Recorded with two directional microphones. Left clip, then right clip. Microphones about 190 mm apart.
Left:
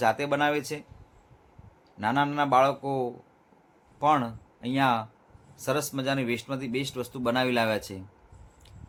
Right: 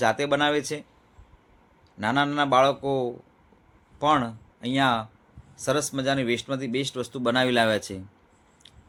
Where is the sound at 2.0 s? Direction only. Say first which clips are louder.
Right 2 dB; 10° right (ahead or behind).